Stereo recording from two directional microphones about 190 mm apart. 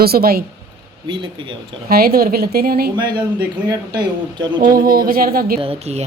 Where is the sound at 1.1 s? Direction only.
25° right (ahead or behind).